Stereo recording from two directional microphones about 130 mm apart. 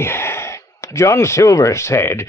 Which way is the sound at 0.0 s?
20° left (ahead or behind).